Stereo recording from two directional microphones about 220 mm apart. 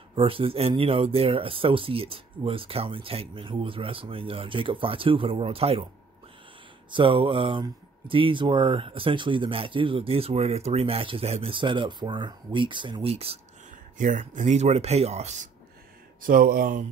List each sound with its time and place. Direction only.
0.1 s speech: 25° right (ahead or behind)
6.9 s speech: 25° right (ahead or behind)
16.2 s speech: 40° right (ahead or behind)